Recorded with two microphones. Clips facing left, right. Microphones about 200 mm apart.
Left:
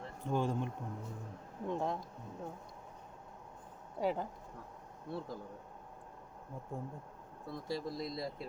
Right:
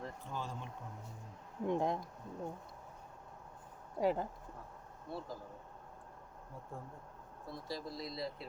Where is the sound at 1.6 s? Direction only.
15° right (ahead or behind).